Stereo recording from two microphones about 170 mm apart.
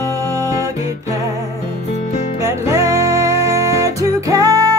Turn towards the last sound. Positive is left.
turn(degrees=-20)  # may be behind; listen again after turning